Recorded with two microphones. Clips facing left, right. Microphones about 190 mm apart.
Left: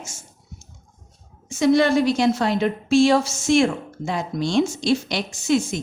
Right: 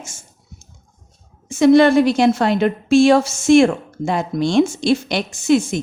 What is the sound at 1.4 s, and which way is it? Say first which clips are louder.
A woman's voice: right 6 dB; 60° right (ahead or behind).